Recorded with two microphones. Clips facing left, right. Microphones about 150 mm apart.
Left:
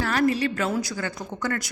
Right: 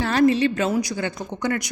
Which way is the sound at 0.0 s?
25° right (ahead or behind).